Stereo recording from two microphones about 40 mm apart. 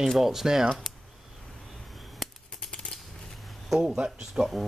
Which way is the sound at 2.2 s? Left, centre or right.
Centre.